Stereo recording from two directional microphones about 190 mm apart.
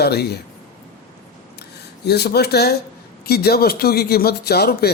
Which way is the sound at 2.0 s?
60° left (ahead or behind).